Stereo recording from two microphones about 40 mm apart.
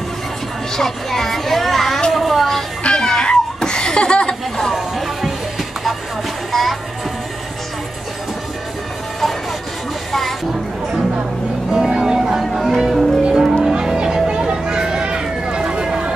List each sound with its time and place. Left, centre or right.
0.7 s speech: centre
2.1 s a sound: centre
2.8 s chuckle: centre
4.7 s music: centre
11.7 s music: centre
12.4 s music: centre